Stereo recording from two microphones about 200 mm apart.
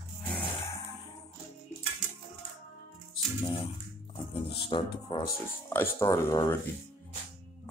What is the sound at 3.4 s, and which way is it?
Typing, 30° left (ahead or behind).